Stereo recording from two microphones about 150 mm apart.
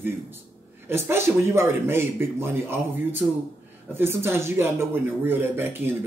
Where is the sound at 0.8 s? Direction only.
15° right (ahead or behind).